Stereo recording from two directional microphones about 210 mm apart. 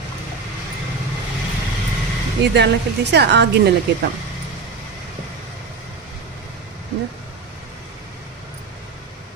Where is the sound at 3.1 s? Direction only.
55° right (ahead or behind).